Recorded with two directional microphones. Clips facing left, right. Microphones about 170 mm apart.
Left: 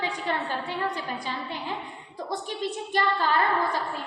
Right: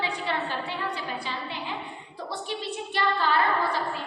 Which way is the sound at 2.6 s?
45° left (ahead or behind).